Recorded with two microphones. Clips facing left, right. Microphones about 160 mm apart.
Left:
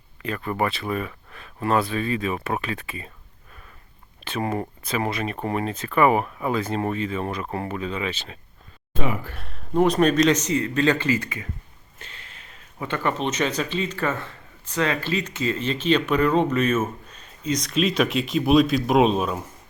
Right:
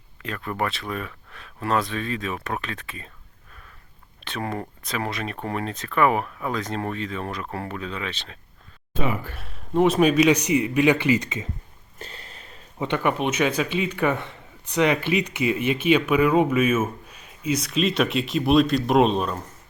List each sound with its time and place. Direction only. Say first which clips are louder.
0.2 s speech: left 3 dB; centre (ahead or behind)
4.2 s speech: left 3 dB; 5° left (ahead or behind)
9.4 s speech: even; centre (ahead or behind); by 11.4 s 20° right (ahead or behind)
11.9 s a sound: right 5 dB; 40° right (ahead or behind)
12.8 s speech: right 2 dB; 15° right (ahead or behind); by 19.5 s 5° left (ahead or behind)